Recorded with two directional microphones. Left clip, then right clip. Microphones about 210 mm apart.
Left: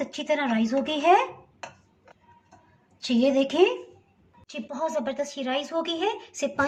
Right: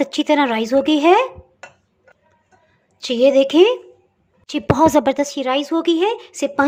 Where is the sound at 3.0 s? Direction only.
45° right (ahead or behind).